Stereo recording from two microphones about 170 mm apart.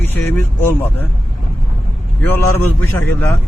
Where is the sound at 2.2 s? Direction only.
10° left (ahead or behind).